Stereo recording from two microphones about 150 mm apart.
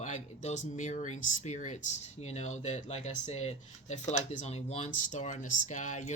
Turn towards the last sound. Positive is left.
turn(degrees=55)  # may be behind; listen again after turning